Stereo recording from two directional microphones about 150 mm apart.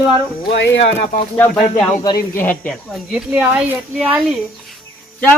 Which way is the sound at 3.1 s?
5° right (ahead or behind).